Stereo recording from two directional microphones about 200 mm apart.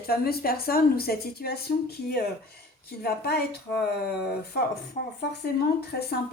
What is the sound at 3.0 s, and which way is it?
Speech, 50° left (ahead or behind).